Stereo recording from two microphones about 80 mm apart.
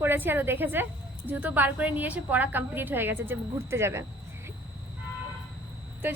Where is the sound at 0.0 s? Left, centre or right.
Right.